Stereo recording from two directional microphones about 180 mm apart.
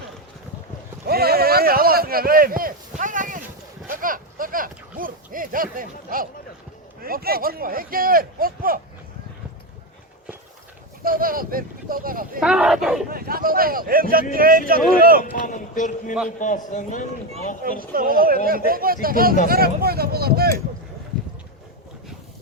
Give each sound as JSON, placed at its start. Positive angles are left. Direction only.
{"t": 1.0, "sound": "a sound", "side_deg": -60}
{"t": 3.0, "sound": "clip-clop", "side_deg": -45}
{"t": 3.8, "sound": "a sound", "side_deg": -50}
{"t": 5.7, "sound": "speech", "side_deg": -50}
{"t": 11.0, "sound": "speech", "side_deg": -50}
{"t": 12.4, "sound": "speech", "side_deg": -5}
{"t": 13.1, "sound": "speech", "side_deg": -55}
{"t": 15.2, "sound": "speech", "side_deg": 45}
{"t": 17.9, "sound": "speech", "side_deg": -50}